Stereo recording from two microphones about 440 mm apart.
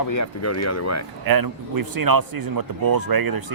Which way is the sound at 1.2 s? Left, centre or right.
Right.